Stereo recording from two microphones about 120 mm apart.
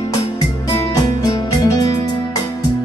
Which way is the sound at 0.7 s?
30° left (ahead or behind).